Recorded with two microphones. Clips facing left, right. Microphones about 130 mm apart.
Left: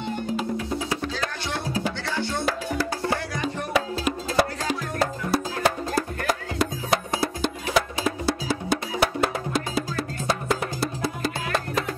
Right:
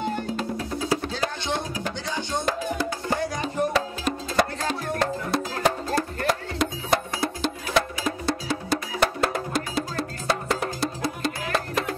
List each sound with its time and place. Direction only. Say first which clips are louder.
0.8 s music: right 2 dB; 30° right (ahead or behind)
2.0 s music: left 1 dB; 15° right (ahead or behind)
3.7 s music: left 1 dB; 10° left (ahead or behind)